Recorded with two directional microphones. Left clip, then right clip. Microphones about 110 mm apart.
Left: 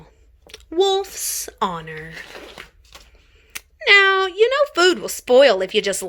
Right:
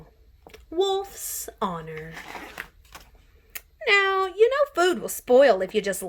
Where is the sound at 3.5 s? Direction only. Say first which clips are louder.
Left 8 dB; 15° left (ahead or behind).